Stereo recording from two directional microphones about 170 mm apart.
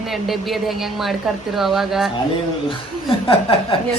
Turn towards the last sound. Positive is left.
turn(degrees=30)  # may be behind; listen again after turning